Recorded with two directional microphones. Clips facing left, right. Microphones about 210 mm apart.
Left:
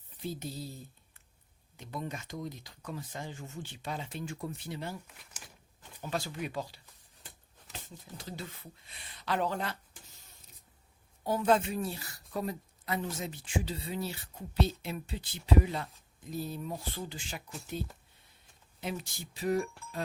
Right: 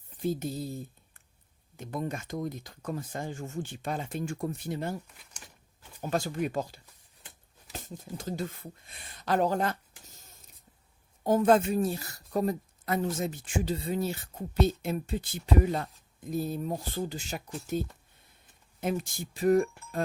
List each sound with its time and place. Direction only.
0.2 s a woman's voice: 50° right (ahead or behind)
5.0 s speech: 5° left (ahead or behind)
6.0 s a woman's voice: 45° right (ahead or behind)
7.7 s a sound: 45° right (ahead or behind)
8.2 s a woman's voice: 45° right (ahead or behind)